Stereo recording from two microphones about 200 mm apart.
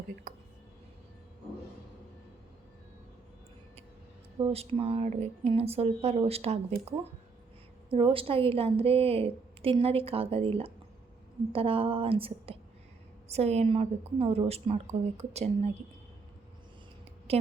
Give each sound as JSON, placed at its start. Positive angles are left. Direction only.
{"t": 0.3, "sound": "a sound", "side_deg": -40}
{"t": 4.4, "sound": "a woman's voice", "side_deg": -30}
{"t": 7.9, "sound": "a woman's voice", "side_deg": -25}
{"t": 17.3, "sound": "a woman's voice", "side_deg": -30}